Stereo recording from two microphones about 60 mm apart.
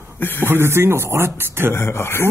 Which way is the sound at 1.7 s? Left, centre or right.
Left.